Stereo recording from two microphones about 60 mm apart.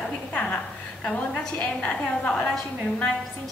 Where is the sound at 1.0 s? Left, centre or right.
Centre.